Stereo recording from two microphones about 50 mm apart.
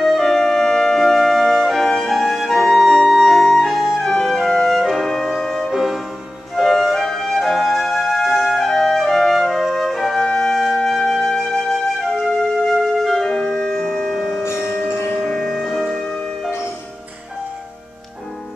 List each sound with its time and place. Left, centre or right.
0.2 s music: centre
10.2 s flute: centre
13.3 s music: centre
14.6 s a sound: left
15.2 s music: centre